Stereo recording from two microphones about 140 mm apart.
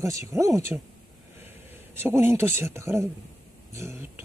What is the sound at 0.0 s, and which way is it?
Speech, 25° right (ahead or behind).